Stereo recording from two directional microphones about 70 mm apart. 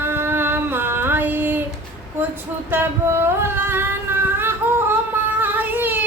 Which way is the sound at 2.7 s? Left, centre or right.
Right.